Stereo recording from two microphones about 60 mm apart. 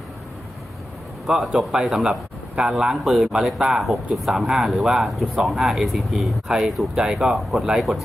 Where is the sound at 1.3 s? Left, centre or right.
Centre.